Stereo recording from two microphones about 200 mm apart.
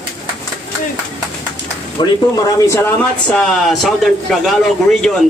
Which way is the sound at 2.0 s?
20° left (ahead or behind).